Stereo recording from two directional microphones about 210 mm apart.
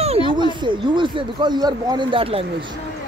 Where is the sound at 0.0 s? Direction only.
25° right (ahead or behind).